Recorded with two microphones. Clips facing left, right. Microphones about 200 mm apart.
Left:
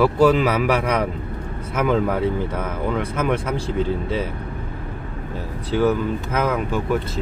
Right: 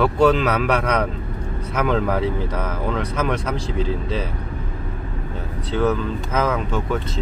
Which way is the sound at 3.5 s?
55° left (ahead or behind).